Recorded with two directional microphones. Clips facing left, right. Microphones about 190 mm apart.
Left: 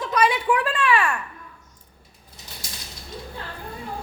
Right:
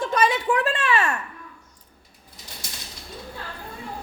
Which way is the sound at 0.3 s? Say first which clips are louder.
Even; 40° right (ahead or behind).